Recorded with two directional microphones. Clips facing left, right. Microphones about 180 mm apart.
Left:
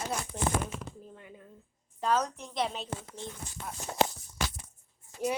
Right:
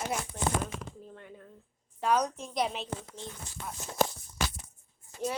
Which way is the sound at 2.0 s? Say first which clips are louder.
Right 1 dB; 10° right (ahead or behind).